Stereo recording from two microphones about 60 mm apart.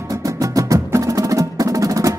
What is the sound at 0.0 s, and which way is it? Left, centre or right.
Music, right.